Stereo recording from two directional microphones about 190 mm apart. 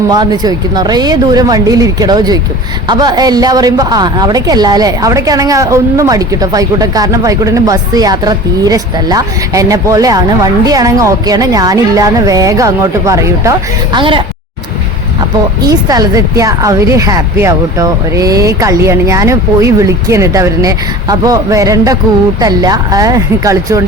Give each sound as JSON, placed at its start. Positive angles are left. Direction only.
{"t": 0.1, "sound": "a woman's voice", "side_deg": -20}
{"t": 15.6, "sound": "a woman's voice", "side_deg": -20}